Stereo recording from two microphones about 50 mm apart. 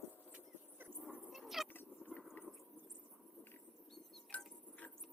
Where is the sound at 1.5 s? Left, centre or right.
Centre.